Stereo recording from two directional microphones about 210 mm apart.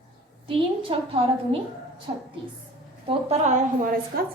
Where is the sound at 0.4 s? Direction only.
25° right (ahead or behind).